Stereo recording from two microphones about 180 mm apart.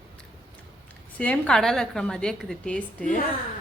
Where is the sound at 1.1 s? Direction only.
10° left (ahead or behind).